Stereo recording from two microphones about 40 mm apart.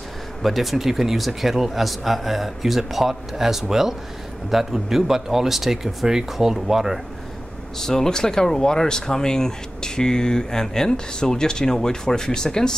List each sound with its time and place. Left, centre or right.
0.4 s speech: centre
7.8 s speech: centre